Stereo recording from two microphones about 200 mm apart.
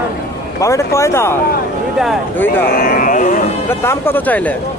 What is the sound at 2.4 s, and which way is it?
Speech, 10° left (ahead or behind).